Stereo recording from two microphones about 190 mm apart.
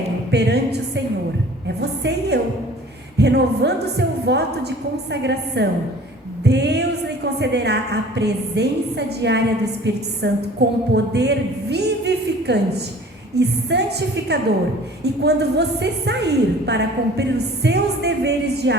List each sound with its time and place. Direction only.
0.3 s a woman's voice: 60° right (ahead or behind)
15.0 s a woman's voice: 60° right (ahead or behind)